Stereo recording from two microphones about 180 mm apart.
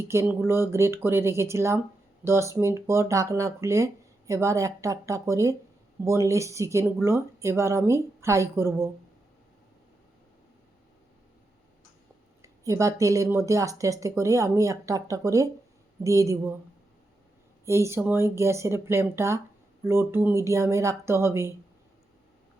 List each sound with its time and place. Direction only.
0.0 s speech: 15° right (ahead or behind)
12.4 s speech: 15° right (ahead or behind)
17.7 s speech: 15° right (ahead or behind)